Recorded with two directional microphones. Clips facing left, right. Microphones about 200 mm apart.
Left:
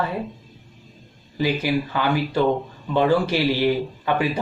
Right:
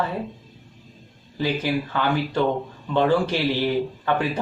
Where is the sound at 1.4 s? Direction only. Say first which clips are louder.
Left 2 dB; 10° left (ahead or behind).